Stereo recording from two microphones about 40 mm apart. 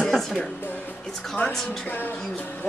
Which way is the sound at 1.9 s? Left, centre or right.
Left.